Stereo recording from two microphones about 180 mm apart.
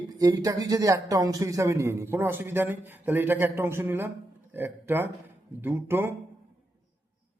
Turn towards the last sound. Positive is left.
turn(degrees=-10)  # may be behind; listen again after turning